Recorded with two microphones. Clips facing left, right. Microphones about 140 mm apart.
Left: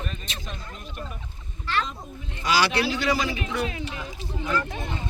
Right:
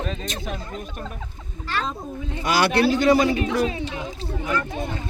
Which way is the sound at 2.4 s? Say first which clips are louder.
Right 4 dB; 55° right (ahead or behind).